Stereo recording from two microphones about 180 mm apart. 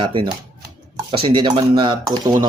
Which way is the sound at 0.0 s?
30° right (ahead or behind).